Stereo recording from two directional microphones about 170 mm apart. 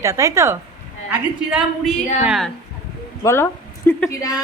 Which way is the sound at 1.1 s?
5° right (ahead or behind).